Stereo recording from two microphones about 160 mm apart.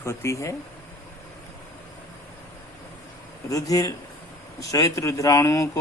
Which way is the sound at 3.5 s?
20° left (ahead or behind).